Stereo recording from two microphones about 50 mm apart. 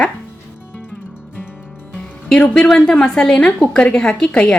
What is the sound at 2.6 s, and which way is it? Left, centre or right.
Speech, centre.